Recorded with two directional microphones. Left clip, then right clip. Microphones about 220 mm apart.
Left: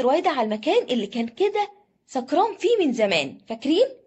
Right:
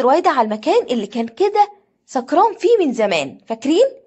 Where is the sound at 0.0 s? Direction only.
15° right (ahead or behind).